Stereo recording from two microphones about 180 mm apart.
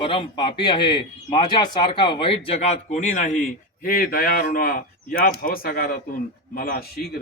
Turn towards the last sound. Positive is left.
turn(degrees=60)  # may be behind; listen again after turning